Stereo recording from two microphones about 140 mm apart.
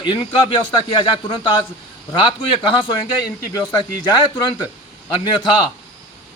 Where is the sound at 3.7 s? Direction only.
30° left (ahead or behind).